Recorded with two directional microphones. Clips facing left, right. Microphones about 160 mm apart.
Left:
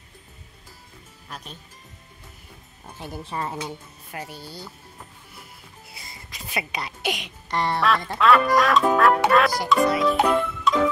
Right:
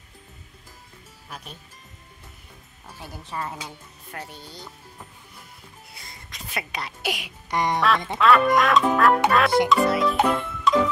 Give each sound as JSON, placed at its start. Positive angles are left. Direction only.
{"t": 1.3, "sound": "speech", "side_deg": -10}
{"t": 3.0, "sound": "speech", "side_deg": 30}
{"t": 4.1, "sound": "speech", "side_deg": 5}
{"t": 5.9, "sound": "whispering", "side_deg": 5}
{"t": 7.8, "sound": "music", "side_deg": 0}